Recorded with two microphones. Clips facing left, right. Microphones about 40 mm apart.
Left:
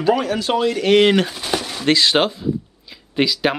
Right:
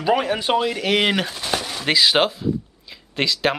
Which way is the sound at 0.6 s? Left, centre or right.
Centre.